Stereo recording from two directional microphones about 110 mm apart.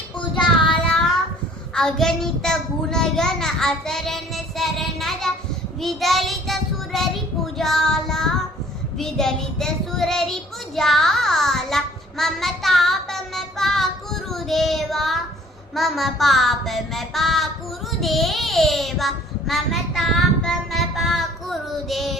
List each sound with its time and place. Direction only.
0.2 s child singing: 45° left (ahead or behind)
0.7 s child singing: 5° left (ahead or behind)
1.7 s a child's voice: 5° left (ahead or behind)
5.8 s child singing: centre (ahead or behind)